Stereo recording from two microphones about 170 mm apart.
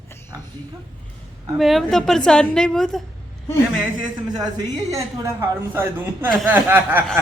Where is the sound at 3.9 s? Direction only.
25° right (ahead or behind).